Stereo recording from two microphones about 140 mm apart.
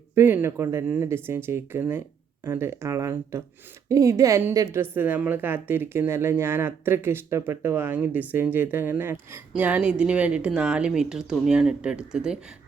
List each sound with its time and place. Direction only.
0.2 s a woman's voice: 15° right (ahead or behind)